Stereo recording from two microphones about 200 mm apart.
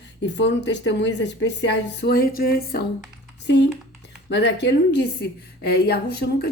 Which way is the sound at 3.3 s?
60° left (ahead or behind).